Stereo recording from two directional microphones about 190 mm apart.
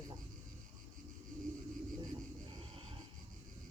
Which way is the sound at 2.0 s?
25° right (ahead or behind).